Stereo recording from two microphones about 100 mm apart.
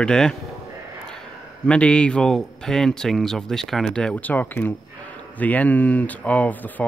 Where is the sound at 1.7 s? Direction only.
10° left (ahead or behind).